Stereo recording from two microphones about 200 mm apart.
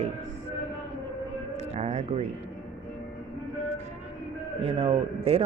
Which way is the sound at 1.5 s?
35° right (ahead or behind).